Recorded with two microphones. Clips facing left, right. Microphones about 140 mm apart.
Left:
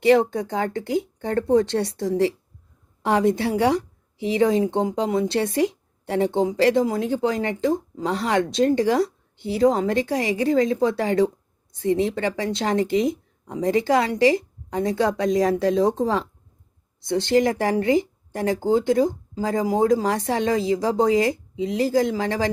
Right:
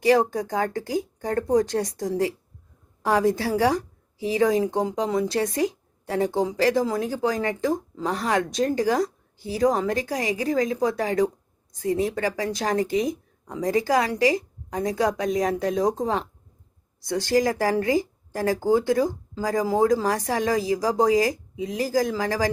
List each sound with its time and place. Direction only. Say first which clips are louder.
0.0 s a woman's voice: left 2 dB; 25° left (ahead or behind)
17.0 s speech: left 3 dB; 25° left (ahead or behind)